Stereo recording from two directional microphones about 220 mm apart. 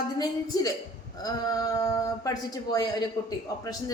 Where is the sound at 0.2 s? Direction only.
15° left (ahead or behind).